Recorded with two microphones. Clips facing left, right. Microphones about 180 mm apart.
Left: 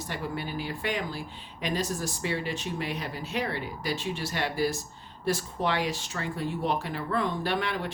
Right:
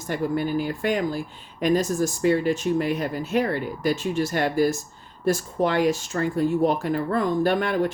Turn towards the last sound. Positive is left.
turn(degrees=-45)  # may be behind; listen again after turning